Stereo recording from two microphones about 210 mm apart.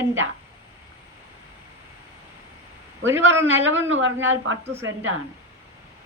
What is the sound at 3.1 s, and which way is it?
Speech, 10° right (ahead or behind).